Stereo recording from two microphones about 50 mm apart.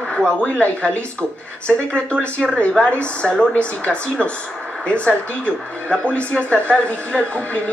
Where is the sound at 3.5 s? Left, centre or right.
Left.